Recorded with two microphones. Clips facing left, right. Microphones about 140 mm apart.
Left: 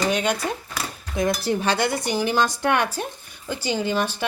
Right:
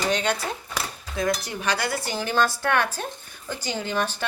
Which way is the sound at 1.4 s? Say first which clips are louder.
Left 5 dB; 30° left (ahead or behind).